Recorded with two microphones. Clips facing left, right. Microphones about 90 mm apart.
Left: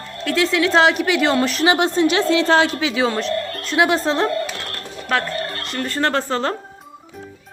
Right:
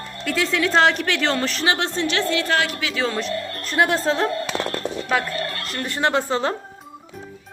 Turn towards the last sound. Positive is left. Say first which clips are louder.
# even
turn(degrees=-15)  # may be behind; listen again after turning